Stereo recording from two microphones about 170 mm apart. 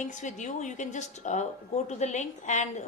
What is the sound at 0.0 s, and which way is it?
A woman's voice, 45° left (ahead or behind).